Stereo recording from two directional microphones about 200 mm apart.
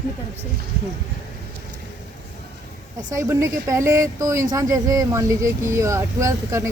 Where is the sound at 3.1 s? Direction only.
15° right (ahead or behind).